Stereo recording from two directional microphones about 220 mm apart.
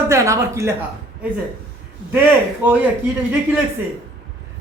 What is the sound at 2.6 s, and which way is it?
Speech, 10° right (ahead or behind).